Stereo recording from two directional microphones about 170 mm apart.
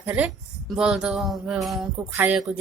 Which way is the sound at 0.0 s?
10° right (ahead or behind).